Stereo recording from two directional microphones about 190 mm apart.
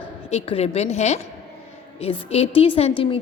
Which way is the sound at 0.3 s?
30° left (ahead or behind).